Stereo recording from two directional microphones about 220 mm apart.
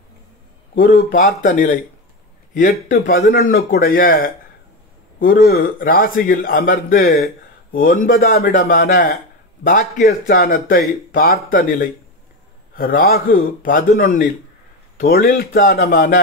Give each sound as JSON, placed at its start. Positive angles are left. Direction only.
{"t": 0.7, "sound": "a man's voice", "side_deg": 40}